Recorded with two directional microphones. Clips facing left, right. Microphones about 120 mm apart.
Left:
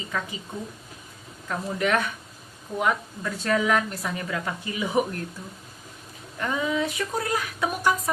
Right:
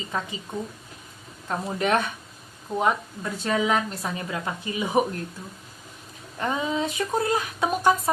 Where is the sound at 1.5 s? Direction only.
30° right (ahead or behind).